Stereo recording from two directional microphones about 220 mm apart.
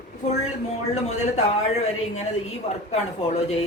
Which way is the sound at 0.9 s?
30° left (ahead or behind).